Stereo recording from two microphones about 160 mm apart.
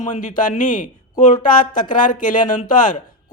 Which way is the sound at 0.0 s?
50° left (ahead or behind).